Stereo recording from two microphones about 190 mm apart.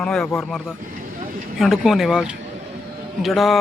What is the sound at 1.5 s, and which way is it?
Speech, centre (ahead or behind).